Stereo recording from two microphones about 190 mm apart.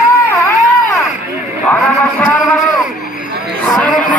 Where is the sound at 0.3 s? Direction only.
15° left (ahead or behind).